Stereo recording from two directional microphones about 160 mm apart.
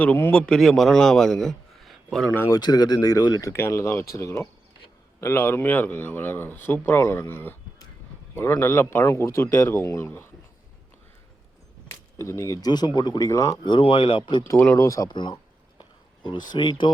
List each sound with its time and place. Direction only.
0.0 s a man's voice: 10° left (ahead or behind)
2.3 s speech: 15° left (ahead or behind)
2.6 s speech: 25° left (ahead or behind)
12.1 s speech: 20° left (ahead or behind)
13.7 s speech: 30° left (ahead or behind)
14.8 s speech: 20° left (ahead or behind)
15.8 s a sound: 30° left (ahead or behind)
16.5 s speech: 30° left (ahead or behind)